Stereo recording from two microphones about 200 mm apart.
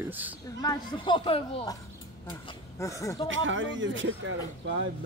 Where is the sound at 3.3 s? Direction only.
70° right (ahead or behind).